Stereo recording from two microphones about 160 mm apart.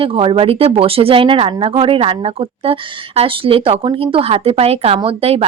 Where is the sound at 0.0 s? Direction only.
35° right (ahead or behind).